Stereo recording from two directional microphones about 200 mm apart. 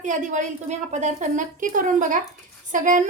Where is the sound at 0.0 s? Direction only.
40° right (ahead or behind).